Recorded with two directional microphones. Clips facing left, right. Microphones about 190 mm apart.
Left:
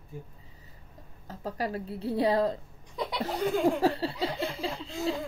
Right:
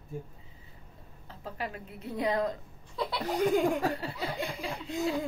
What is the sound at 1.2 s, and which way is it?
Speech, 40° left (ahead or behind).